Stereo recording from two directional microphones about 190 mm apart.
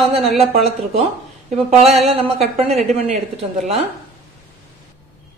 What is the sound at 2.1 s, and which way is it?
A woman's voice, 30° right (ahead or behind).